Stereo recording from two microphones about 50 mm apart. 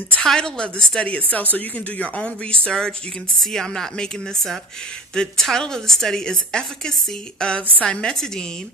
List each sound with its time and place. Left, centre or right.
0.2 s a woman's voice: centre
1.0 s a woman's voice: left
8.1 s a woman's voice: centre